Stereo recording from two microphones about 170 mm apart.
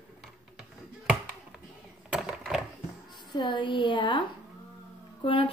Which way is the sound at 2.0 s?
5° right (ahead or behind).